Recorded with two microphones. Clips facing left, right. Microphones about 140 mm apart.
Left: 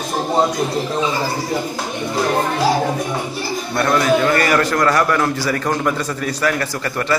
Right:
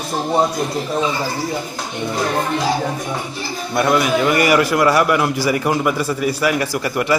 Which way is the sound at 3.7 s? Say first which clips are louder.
Even; 10° right (ahead or behind).